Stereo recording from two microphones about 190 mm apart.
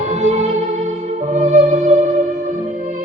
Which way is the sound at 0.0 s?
35° right (ahead or behind).